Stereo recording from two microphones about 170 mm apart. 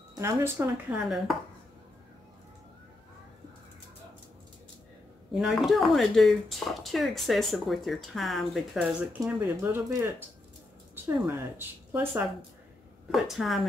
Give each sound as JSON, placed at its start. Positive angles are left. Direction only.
{"t": 0.1, "sound": "speech", "side_deg": -15}
{"t": 0.9, "sound": "speech", "side_deg": 0}
{"t": 5.3, "sound": "speech", "side_deg": -5}
{"t": 9.2, "sound": "speech", "side_deg": -15}
{"t": 13.1, "sound": "speech", "side_deg": 0}